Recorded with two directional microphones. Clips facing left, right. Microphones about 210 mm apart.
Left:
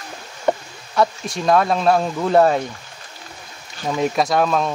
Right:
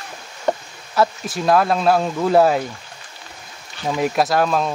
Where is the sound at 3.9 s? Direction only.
5° right (ahead or behind).